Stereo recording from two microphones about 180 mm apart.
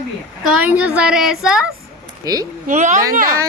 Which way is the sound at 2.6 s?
40° right (ahead or behind).